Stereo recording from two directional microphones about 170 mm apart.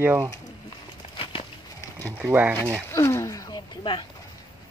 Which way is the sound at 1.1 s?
30° left (ahead or behind).